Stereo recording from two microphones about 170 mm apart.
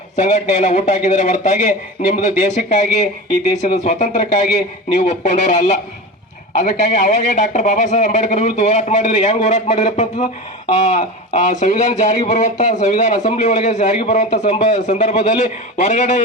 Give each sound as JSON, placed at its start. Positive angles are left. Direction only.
{"t": 0.2, "sound": "a man's voice", "side_deg": 45}